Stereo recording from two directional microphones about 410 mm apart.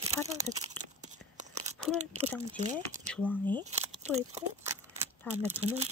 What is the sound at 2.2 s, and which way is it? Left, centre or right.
Speech, centre.